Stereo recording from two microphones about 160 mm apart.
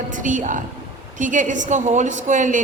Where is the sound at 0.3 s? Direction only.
55° right (ahead or behind).